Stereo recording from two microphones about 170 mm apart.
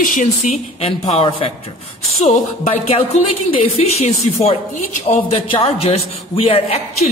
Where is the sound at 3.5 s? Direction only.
35° left (ahead or behind).